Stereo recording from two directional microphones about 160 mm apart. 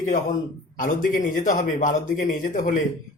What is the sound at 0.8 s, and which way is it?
Speech, 55° left (ahead or behind).